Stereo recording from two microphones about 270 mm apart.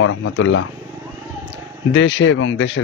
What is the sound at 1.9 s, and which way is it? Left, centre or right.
Speech, left.